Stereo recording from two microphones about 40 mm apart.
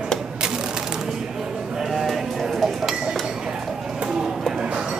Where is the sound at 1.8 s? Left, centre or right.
Centre.